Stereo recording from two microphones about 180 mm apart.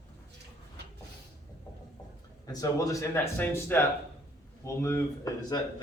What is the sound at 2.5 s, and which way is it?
Speech, 20° left (ahead or behind).